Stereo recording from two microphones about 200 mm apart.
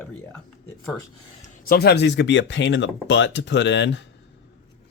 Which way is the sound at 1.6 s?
50° left (ahead or behind).